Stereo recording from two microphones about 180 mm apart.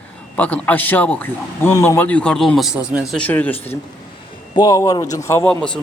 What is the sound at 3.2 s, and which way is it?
A man's voice, 10° left (ahead or behind).